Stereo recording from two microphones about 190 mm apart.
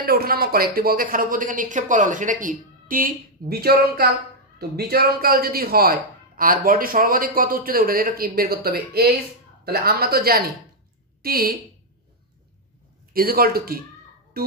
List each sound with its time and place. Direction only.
0.0 s speech: 50° right (ahead or behind)
13.1 s speech: 50° right (ahead or behind)